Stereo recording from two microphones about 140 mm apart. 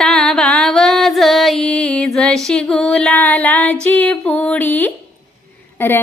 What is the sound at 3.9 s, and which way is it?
Music, 10° left (ahead or behind).